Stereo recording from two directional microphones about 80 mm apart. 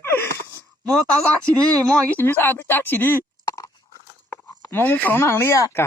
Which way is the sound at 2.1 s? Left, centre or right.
Left.